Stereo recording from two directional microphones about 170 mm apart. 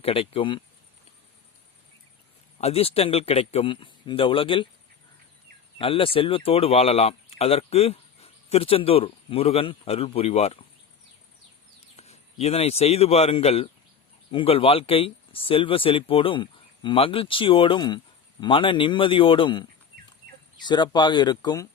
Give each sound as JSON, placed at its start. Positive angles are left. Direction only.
{"t": 0.0, "sound": "speech", "side_deg": 35}
{"t": 2.6, "sound": "speech", "side_deg": 35}
{"t": 5.8, "sound": "speech", "side_deg": 30}
{"t": 11.9, "sound": "a man's voice", "side_deg": 40}